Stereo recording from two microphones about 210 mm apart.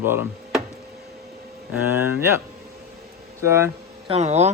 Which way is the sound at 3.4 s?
10° right (ahead or behind).